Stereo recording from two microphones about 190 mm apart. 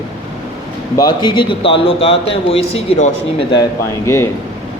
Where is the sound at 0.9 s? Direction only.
25° left (ahead or behind).